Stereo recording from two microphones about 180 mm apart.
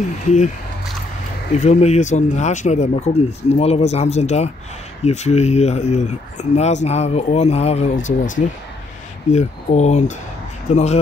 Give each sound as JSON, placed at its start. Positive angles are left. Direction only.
{"t": 1.6, "sound": "speech", "side_deg": 40}